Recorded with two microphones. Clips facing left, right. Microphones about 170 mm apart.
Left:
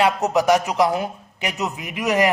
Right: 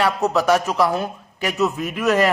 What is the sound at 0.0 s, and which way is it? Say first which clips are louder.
A man's voice: left 1 dB; 15° left (ahead or behind).